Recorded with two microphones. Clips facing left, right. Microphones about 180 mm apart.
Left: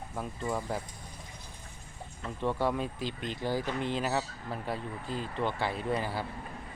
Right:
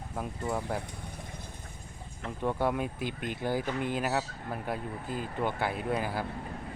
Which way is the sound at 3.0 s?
55° right (ahead or behind).